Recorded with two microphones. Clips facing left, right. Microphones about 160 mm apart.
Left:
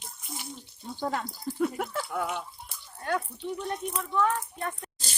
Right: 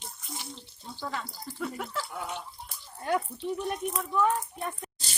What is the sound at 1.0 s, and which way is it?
Speech, 50° left (ahead or behind).